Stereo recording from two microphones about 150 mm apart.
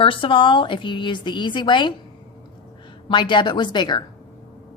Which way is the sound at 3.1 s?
30° left (ahead or behind).